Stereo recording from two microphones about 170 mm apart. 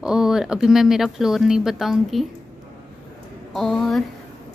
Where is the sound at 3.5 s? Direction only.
Centre (ahead or behind).